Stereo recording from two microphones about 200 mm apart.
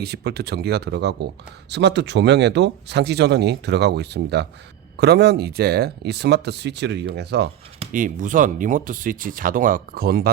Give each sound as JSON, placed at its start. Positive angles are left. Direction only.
{"t": 0.0, "sound": "speech", "side_deg": -55}
{"t": 7.9, "sound": "speech", "side_deg": -40}